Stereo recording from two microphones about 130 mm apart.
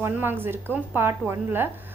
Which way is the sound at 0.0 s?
15° right (ahead or behind).